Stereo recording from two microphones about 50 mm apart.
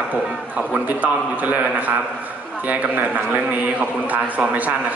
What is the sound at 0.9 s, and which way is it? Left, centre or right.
A man's voice, right.